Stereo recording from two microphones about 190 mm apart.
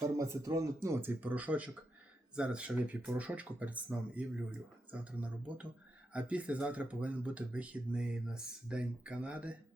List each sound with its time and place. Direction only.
0.2 s speech: 15° right (ahead or behind)